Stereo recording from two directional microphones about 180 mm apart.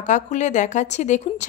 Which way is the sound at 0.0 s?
40° left (ahead or behind).